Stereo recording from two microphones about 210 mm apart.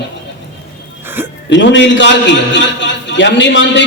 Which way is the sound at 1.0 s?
10° right (ahead or behind).